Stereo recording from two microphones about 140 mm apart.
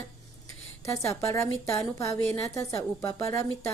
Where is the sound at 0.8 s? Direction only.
20° left (ahead or behind).